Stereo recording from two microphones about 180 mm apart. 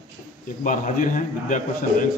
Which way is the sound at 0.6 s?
45° left (ahead or behind).